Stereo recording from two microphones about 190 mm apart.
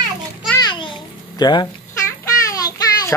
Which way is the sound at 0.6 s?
25° left (ahead or behind).